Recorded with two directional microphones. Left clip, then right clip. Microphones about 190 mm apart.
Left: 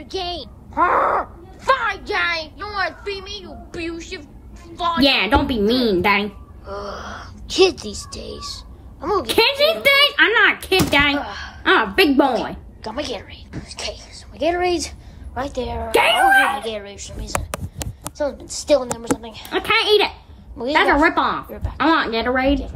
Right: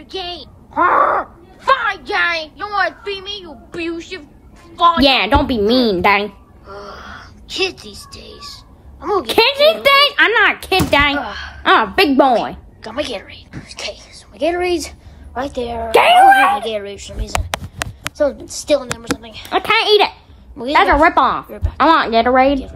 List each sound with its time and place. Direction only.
0.1 s groan: 5° left (ahead or behind)
2.6 s a sound: centre (ahead or behind)
5.0 s a woman's voice: 40° right (ahead or behind)
6.6 s speech: 10° left (ahead or behind)
9.2 s speech: 45° right (ahead or behind)
11.1 s speech: centre (ahead or behind)
11.6 s speech: 45° right (ahead or behind)
12.8 s a woman's voice: 5° left (ahead or behind)
15.9 s a woman's voice: 40° right (ahead or behind)
16.6 s a woman's voice: centre (ahead or behind)
19.5 s speech: 45° right (ahead or behind)
21.5 s a woman's voice: 5° left (ahead or behind)
21.7 s speech: 45° right (ahead or behind)